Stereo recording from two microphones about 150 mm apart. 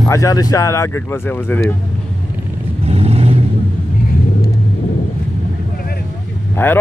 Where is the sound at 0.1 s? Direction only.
20° left (ahead or behind).